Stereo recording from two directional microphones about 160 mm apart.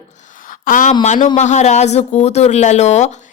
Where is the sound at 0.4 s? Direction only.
55° left (ahead or behind).